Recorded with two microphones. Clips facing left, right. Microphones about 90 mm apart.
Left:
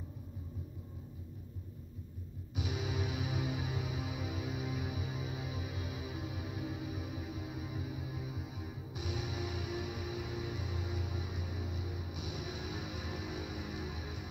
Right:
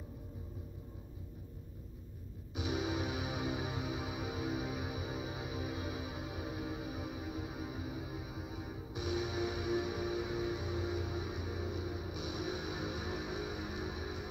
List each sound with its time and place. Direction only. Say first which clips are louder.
2.6 s music: right 3 dB; 35° right (ahead or behind)